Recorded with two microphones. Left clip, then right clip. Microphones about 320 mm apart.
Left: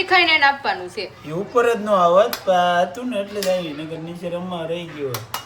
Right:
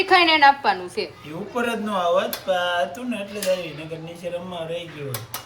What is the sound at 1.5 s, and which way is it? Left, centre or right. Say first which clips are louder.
Speech: left 8 dB; left.